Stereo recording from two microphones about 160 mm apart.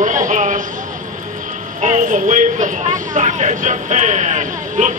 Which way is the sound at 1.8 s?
50° right (ahead or behind).